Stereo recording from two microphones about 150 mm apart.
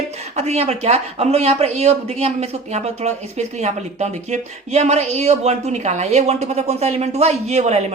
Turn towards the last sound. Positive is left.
turn(degrees=-50)  # may be behind; listen again after turning